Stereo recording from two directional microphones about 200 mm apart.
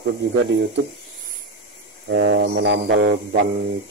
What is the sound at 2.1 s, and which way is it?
Mantra, 65° right (ahead or behind).